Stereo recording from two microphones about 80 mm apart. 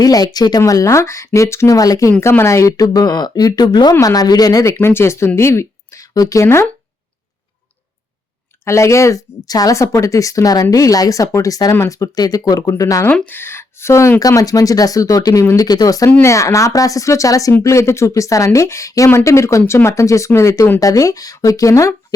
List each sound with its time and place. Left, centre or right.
0.0 s speech: left
0.6 s speech: left
2.2 s speech: left
4.6 s speech: left
8.6 s speech: left
13.2 s speech: left
14.2 s speech: left